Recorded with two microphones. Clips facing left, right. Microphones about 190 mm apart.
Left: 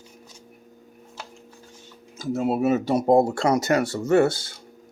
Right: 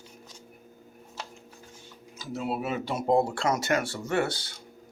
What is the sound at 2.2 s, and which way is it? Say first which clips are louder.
Speech: left 9 dB; 45° left (ahead or behind).